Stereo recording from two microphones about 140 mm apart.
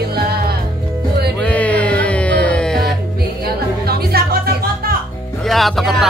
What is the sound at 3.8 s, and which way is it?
Music, 90° right.